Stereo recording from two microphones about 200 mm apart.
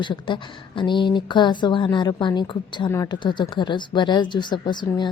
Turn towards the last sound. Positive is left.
turn(degrees=20)  # may be behind; listen again after turning